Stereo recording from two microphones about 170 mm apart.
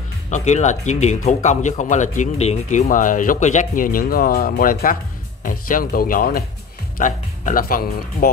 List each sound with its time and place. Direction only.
0.3 s speech: 45° left (ahead or behind); by 8.3 s 60° left (ahead or behind)